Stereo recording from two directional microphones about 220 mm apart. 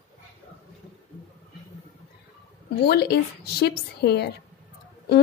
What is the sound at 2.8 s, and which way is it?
A woman's voice, 50° left (ahead or behind).